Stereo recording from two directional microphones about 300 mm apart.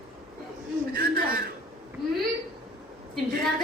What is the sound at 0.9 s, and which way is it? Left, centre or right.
Speech, right.